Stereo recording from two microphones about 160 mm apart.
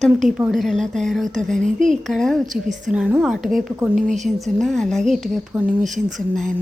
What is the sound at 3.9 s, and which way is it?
Speech, 55° right (ahead or behind).